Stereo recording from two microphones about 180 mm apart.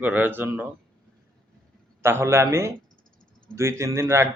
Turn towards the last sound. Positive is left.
turn(degrees=-15)  # may be behind; listen again after turning